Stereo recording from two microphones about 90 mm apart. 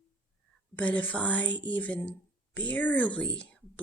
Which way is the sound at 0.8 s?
15° left (ahead or behind).